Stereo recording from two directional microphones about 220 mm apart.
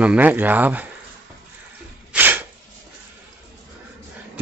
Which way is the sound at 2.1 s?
10° right (ahead or behind).